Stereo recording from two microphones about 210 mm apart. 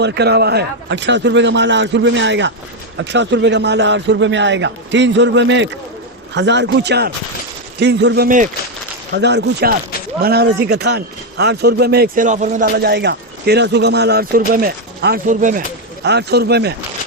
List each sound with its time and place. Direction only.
0.0 s a man's voice: 55° right (ahead or behind)
9.1 s a man's voice: 55° right (ahead or behind); by 12.6 s 35° right (ahead or behind)
12.7 s speech: 50° right (ahead or behind); by 15.6 s 35° right (ahead or behind)
16.0 s speech: 50° right (ahead or behind)